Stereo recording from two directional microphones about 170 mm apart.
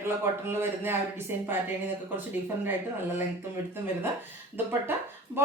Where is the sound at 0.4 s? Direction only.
15° right (ahead or behind).